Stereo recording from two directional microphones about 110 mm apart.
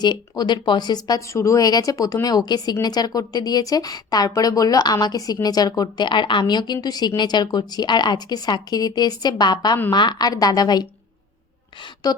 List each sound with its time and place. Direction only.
0.0 s a woman's voice: 40° left (ahead or behind)
12.1 s a woman's voice: 35° left (ahead or behind)